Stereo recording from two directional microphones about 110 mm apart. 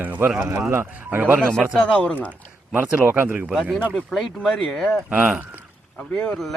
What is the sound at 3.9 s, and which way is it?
A man's voice, centre (ahead or behind).